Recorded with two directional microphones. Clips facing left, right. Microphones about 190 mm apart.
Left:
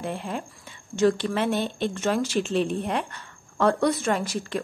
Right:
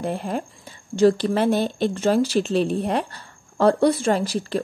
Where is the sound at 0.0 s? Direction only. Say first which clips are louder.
Right 5 dB; 40° right (ahead or behind).